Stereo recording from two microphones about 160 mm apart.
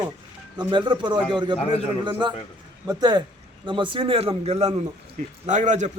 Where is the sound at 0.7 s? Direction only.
30° right (ahead or behind).